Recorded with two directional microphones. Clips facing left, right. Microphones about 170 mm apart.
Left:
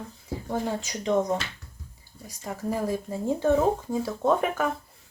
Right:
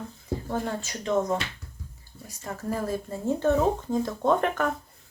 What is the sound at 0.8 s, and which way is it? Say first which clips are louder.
Speech: left 2 dB; 15° left (ahead or behind).